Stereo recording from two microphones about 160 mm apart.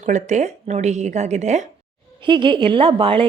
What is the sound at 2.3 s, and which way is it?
A woman's voice, 30° right (ahead or behind).